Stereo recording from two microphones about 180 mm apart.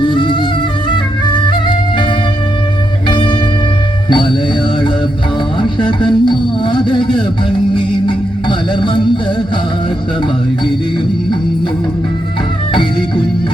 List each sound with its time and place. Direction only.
0.0 s music: 25° left (ahead or behind)
3.1 s music: 25° left (ahead or behind)
5.5 s music: 25° left (ahead or behind)